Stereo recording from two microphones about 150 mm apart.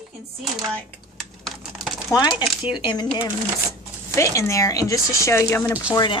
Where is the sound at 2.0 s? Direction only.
25° left (ahead or behind).